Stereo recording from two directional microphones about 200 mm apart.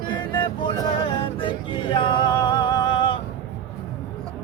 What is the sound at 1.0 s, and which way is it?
Music, 25° left (ahead or behind).